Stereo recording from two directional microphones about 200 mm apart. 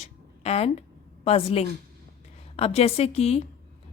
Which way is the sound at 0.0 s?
30° left (ahead or behind).